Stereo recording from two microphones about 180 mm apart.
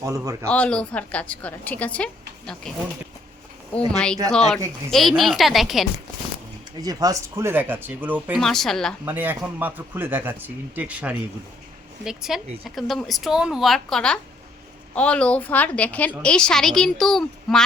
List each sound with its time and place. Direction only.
0.0 s speech: 20° right (ahead or behind)
0.4 s a woman's voice: 5° left (ahead or behind)
3.9 s speech: 5° left (ahead or behind)
6.8 s speech: 20° right (ahead or behind)
8.4 s speech: centre (ahead or behind)
9.0 s a woman's voice: 10° right (ahead or behind)